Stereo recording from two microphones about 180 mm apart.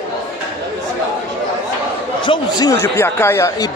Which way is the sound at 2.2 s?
25° left (ahead or behind).